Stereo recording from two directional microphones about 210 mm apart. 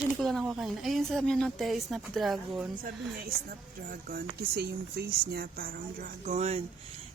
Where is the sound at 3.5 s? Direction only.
45° right (ahead or behind).